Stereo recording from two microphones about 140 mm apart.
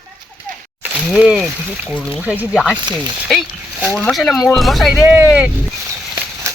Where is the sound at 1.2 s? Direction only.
5° right (ahead or behind).